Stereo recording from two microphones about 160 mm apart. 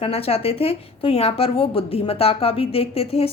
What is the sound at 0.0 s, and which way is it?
A woman's voice, 40° left (ahead or behind).